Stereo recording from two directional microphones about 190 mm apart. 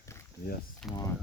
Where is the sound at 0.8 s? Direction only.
5° left (ahead or behind).